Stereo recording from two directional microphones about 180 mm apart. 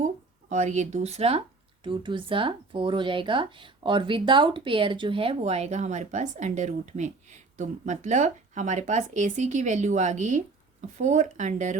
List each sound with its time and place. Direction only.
0.5 s speech: 45° right (ahead or behind)